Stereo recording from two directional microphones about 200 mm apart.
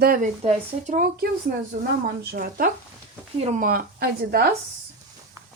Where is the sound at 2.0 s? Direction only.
50° right (ahead or behind).